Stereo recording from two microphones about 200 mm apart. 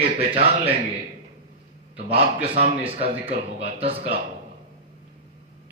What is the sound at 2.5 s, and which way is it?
A man's voice, 30° right (ahead or behind).